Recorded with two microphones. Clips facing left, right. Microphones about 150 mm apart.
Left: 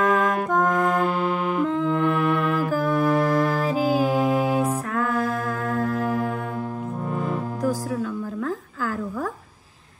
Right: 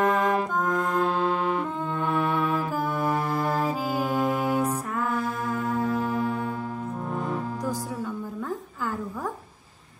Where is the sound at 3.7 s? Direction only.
90° left.